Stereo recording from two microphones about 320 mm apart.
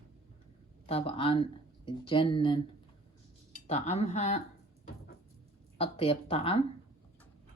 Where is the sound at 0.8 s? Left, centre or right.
Centre.